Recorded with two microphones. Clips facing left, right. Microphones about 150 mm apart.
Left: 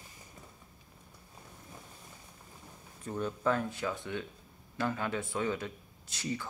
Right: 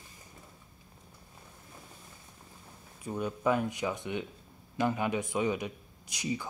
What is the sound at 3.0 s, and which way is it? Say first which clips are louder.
A man's voice: right 1 dB; 10° right (ahead or behind).